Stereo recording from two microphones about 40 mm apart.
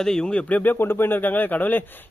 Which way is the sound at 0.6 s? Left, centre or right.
Left.